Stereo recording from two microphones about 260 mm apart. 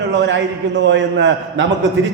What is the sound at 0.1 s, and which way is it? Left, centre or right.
A man's voice, right.